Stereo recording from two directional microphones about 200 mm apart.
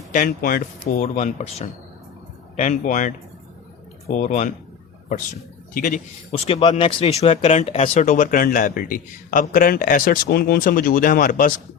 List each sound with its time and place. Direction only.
0.1 s a man's voice: 45° left (ahead or behind)
4.1 s a man's voice: 35° left (ahead or behind)
5.7 s a man's voice: 40° left (ahead or behind)